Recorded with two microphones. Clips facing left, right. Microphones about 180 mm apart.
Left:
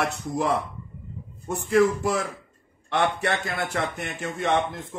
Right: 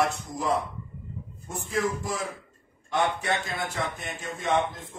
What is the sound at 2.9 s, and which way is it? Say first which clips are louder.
Speech: left 2 dB; 70° left (ahead or behind).